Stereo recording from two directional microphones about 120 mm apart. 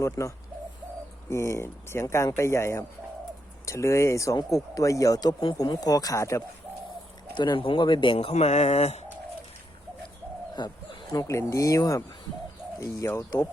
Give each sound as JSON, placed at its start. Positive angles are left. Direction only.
{"t": 0.0, "sound": "speech", "side_deg": 25}
{"t": 7.3, "sound": "speech", "side_deg": 40}
{"t": 10.6, "sound": "speech", "side_deg": 40}
{"t": 11.1, "sound": "speech", "side_deg": 30}